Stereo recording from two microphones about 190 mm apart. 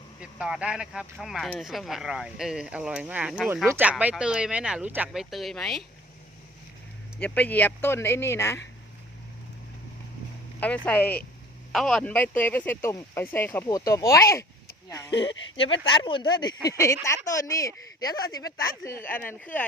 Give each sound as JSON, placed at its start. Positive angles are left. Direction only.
{"t": 0.2, "sound": "speech", "side_deg": -5}
{"t": 7.2, "sound": "speech", "side_deg": 5}
{"t": 10.6, "sound": "speech", "side_deg": 10}
{"t": 15.1, "sound": "speech", "side_deg": 70}
{"t": 15.6, "sound": "speech", "side_deg": 80}
{"t": 15.9, "sound": "speech", "side_deg": 25}